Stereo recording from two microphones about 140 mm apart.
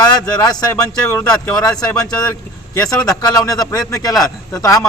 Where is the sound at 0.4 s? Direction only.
25° left (ahead or behind).